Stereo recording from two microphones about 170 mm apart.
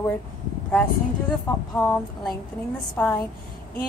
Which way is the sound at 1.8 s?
10° left (ahead or behind).